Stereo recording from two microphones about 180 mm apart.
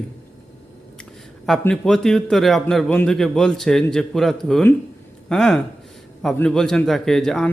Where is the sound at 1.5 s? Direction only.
Centre (ahead or behind).